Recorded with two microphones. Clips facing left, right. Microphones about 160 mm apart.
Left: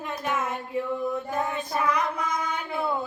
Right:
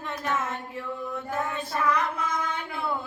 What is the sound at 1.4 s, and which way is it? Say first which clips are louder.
Child singing: right 2 dB; 15° left (ahead or behind).